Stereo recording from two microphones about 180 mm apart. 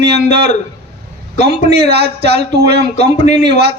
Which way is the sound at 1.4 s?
65° right (ahead or behind).